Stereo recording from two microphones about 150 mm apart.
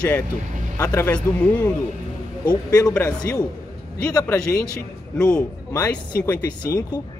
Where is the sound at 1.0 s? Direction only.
10° left (ahead or behind).